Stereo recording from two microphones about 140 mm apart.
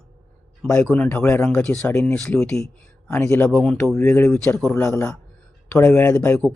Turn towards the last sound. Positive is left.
turn(degrees=15)  # may be behind; listen again after turning